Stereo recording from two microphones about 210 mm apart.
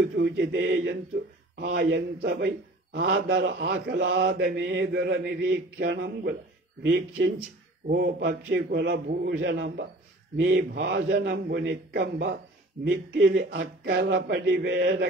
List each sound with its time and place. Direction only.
0.1 s a man's voice: 55° right (ahead or behind)